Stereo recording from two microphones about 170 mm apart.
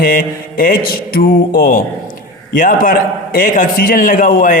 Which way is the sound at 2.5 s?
50° left (ahead or behind).